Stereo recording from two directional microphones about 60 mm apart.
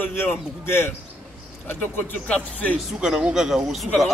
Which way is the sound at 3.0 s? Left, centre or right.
Centre.